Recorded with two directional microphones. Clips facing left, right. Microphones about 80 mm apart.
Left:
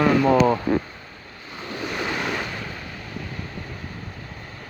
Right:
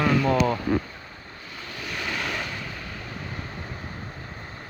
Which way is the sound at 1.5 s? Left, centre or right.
Left.